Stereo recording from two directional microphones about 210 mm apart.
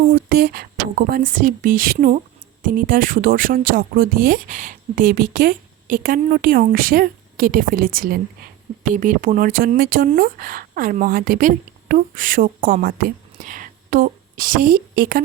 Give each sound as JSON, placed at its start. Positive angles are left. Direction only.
{"t": 0.1, "sound": "speech", "side_deg": -45}